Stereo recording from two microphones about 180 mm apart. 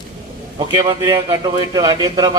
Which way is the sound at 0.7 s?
25° right (ahead or behind).